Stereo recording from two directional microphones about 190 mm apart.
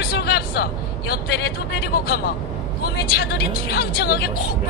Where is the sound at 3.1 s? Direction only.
55° left (ahead or behind).